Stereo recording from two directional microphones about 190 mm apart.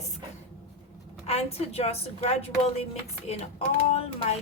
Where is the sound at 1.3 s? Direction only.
30° left (ahead or behind).